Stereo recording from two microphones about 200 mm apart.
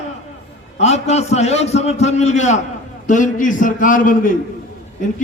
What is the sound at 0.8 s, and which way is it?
A man's voice, 35° left (ahead or behind).